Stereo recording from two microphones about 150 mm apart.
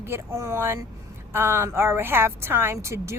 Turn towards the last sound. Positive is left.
turn(degrees=-20)  # may be behind; listen again after turning